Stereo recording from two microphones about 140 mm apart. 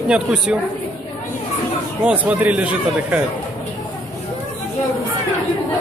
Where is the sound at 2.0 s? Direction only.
10° right (ahead or behind).